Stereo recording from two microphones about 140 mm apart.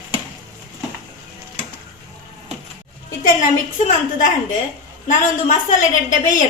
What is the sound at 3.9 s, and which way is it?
A woman's voice, 60° left (ahead or behind).